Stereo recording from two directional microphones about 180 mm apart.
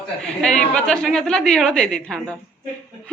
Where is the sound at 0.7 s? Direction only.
5° left (ahead or behind).